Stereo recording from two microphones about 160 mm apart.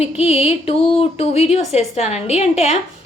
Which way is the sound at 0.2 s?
40° left (ahead or behind).